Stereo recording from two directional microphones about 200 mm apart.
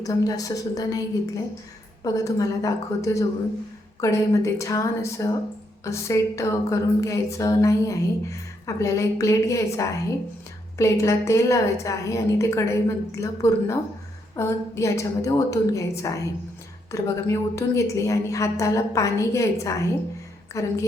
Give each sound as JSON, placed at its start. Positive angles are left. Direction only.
{"t": 0.0, "sound": "a woman's voice", "side_deg": 20}
{"t": 2.0, "sound": "a woman's voice", "side_deg": 15}